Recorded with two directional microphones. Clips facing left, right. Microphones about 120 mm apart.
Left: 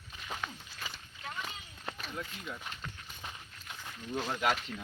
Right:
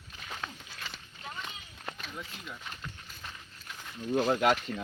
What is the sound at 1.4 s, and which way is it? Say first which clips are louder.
Run: even; centre (ahead or behind).